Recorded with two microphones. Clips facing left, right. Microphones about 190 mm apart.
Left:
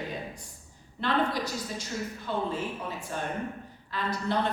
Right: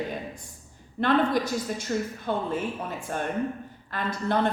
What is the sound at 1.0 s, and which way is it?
A woman's voice, 50° right (ahead or behind).